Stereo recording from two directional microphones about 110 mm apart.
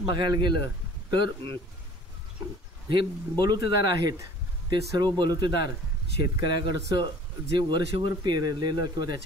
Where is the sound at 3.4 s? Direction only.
40° right (ahead or behind).